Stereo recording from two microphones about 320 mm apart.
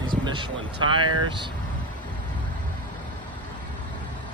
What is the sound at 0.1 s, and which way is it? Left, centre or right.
Speech, centre.